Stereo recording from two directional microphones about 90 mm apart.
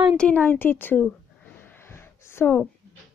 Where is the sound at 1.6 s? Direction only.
25° left (ahead or behind).